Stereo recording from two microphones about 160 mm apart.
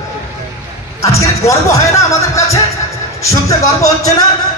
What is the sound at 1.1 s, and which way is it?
Speech, 20° left (ahead or behind).